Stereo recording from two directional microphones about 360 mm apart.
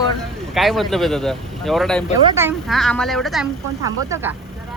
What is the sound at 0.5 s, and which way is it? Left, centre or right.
Speech, centre.